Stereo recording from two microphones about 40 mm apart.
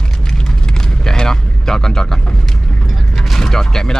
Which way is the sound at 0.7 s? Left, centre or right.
Centre.